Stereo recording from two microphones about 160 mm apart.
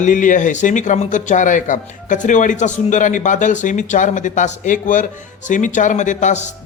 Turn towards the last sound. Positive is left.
turn(degrees=50)  # may be behind; listen again after turning